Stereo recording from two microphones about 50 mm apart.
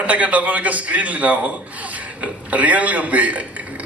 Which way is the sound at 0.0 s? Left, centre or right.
Right.